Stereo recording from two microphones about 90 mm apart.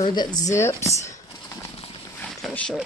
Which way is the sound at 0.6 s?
30° left (ahead or behind).